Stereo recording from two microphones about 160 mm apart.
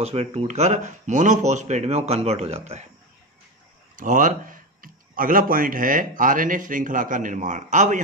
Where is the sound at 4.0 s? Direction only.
55° right (ahead or behind).